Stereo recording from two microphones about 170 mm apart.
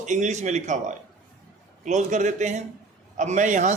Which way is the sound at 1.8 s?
45° right (ahead or behind).